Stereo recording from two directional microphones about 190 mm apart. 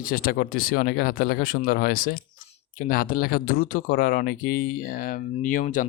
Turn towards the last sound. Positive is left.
turn(degrees=45)  # may be behind; listen again after turning